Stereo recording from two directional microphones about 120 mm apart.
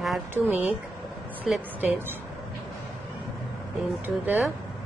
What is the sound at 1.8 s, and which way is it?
Speech, 15° right (ahead or behind).